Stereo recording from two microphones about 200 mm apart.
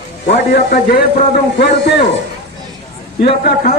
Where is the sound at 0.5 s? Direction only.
50° left (ahead or behind).